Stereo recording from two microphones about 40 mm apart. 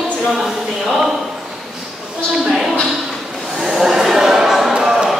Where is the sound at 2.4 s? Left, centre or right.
Centre.